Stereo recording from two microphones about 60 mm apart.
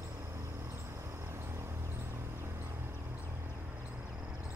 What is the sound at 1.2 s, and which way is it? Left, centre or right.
Music, right.